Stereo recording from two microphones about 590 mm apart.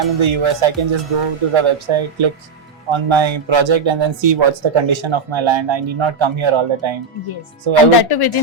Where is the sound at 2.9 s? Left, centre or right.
Right.